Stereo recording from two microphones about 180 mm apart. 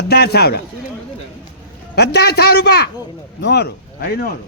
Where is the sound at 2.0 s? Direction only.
65° left (ahead or behind).